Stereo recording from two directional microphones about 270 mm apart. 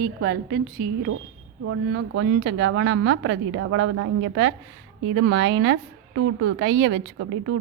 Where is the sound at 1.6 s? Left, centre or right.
Right.